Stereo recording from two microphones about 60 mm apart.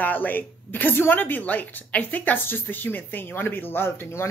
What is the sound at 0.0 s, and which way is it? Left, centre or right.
Speech, left.